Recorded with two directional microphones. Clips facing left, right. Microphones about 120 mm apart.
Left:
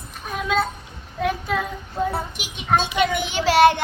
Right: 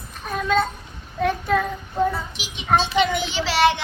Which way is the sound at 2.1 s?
50° left (ahead or behind).